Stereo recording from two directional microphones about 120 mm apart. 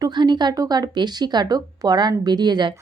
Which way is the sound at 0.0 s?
40° right (ahead or behind).